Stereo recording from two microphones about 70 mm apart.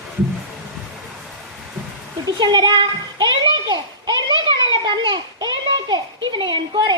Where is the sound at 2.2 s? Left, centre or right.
Right.